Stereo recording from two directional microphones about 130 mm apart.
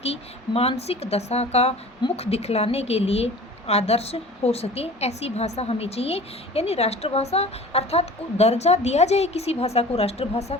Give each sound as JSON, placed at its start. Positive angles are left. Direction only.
{"t": 0.0, "sound": "a woman's voice", "side_deg": 50}